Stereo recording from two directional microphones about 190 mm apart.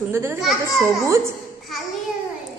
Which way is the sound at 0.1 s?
10° right (ahead or behind).